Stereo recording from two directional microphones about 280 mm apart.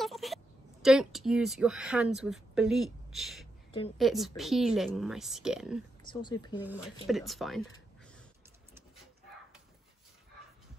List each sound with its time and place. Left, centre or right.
0.0 s a sound: centre
0.8 s speech: centre
6.0 s speech: centre
6.6 s speech: centre